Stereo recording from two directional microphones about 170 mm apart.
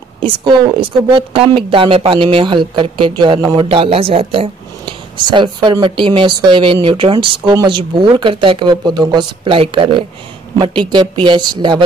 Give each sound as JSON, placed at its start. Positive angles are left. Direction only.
{"t": 0.2, "sound": "speech", "side_deg": -30}